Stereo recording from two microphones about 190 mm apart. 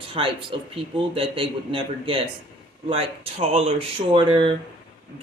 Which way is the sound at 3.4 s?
30° right (ahead or behind).